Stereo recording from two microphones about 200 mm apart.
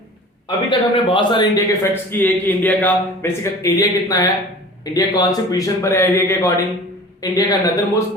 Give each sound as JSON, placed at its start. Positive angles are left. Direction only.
{"t": 0.4, "sound": "a man's voice", "side_deg": 25}
{"t": 1.8, "sound": "a man's voice", "side_deg": 10}